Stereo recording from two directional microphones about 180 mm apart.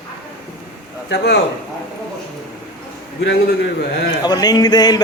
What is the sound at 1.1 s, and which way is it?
Speech, 70° left (ahead or behind).